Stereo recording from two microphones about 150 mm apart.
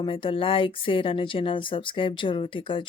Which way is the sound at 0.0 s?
35° left (ahead or behind).